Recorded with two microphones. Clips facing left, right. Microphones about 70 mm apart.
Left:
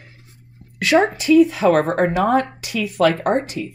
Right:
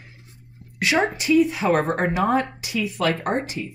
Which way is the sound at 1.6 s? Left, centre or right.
Centre.